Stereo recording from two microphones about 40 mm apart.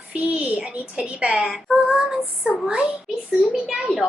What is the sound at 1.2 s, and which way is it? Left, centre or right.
A woman's voice, centre.